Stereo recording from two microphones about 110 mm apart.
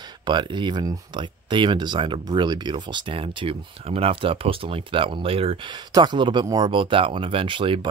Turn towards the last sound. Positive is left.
turn(degrees=-50)  # may be behind; listen again after turning